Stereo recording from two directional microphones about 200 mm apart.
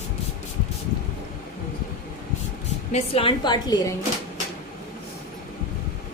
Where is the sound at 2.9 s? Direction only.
25° left (ahead or behind).